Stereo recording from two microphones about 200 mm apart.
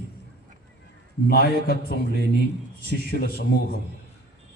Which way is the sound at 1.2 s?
50° left (ahead or behind).